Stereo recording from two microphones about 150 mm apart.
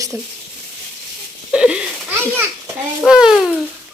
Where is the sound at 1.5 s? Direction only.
5° right (ahead or behind).